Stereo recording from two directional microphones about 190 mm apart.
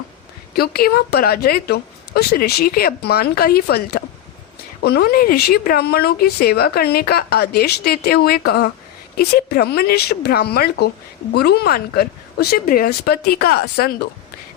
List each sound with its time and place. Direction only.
0.5 s speech: 55° left (ahead or behind)